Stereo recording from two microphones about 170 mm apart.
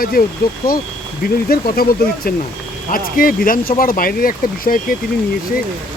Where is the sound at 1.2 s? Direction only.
60° left (ahead or behind).